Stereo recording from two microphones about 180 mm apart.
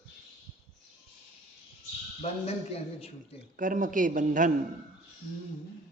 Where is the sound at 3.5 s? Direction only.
50° right (ahead or behind).